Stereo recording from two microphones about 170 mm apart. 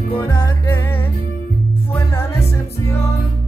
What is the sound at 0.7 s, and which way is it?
Music, 15° left (ahead or behind).